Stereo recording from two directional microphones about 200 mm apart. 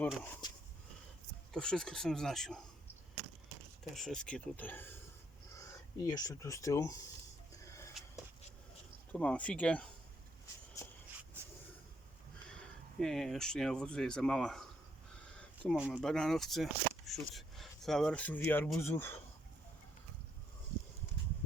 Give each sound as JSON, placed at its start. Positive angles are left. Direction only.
{"t": 0.0, "sound": "speech", "side_deg": 10}
{"t": 1.5, "sound": "speech", "side_deg": 5}
{"t": 3.9, "sound": "speech", "side_deg": 5}
{"t": 7.6, "sound": "a sound", "side_deg": 15}
{"t": 9.1, "sound": "speech", "side_deg": 5}
{"t": 11.3, "sound": "a sound", "side_deg": -10}
{"t": 13.0, "sound": "speech", "side_deg": 0}